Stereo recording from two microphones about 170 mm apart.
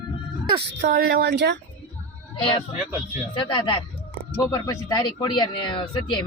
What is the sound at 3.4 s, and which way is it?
Speech, 30° left (ahead or behind).